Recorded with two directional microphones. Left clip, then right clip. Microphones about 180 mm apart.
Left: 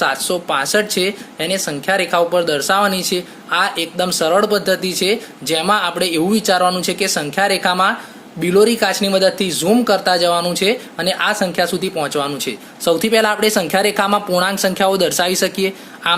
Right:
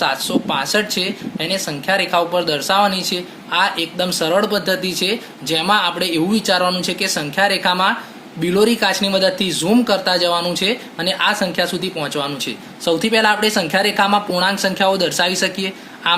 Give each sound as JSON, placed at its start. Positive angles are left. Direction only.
{"t": 0.0, "sound": "speech", "side_deg": 45}